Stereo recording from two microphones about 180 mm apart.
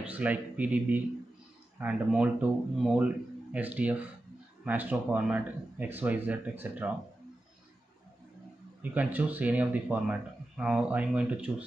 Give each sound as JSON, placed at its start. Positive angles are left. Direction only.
{"t": 0.0, "sound": "speech", "side_deg": -10}
{"t": 8.9, "sound": "speech", "side_deg": -10}